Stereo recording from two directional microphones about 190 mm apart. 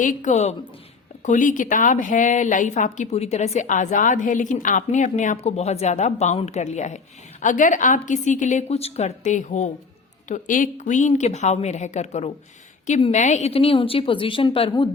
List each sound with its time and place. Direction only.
0.0 s a woman's voice: 40° left (ahead or behind)